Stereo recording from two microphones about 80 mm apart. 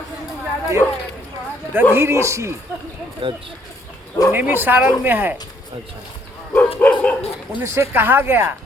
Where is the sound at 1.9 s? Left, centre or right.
Right.